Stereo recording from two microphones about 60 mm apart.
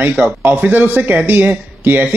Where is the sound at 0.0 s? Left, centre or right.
Right.